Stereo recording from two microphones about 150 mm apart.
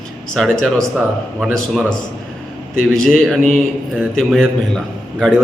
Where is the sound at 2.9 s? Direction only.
5° left (ahead or behind).